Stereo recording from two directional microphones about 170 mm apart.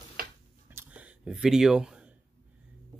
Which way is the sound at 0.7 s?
10° right (ahead or behind).